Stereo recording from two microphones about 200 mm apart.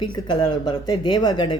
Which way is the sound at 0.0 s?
20° left (ahead or behind).